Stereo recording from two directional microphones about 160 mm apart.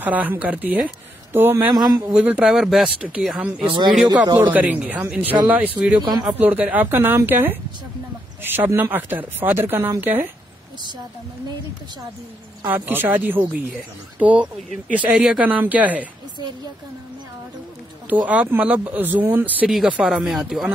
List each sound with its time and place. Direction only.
0.0 s speech: 10° right (ahead or behind)
1.7 s a man's voice: 25° right (ahead or behind)
2.1 s speech: 10° right (ahead or behind)
3.7 s a man's voice: 30° right (ahead or behind)
4.4 s speech: 10° right (ahead or behind)
12.6 s speech: 10° right (ahead or behind)
18.2 s speech: 10° right (ahead or behind)